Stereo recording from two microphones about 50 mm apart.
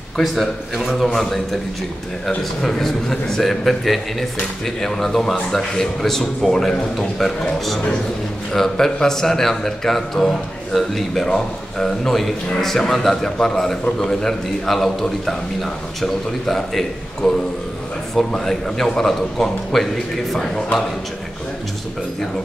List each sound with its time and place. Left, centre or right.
0.2 s a man's voice: centre
20.3 s speech: centre